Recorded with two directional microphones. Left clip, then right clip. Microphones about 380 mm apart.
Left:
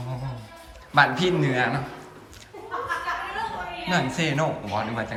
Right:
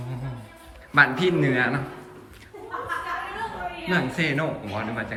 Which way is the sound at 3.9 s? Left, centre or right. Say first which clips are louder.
Even; centre.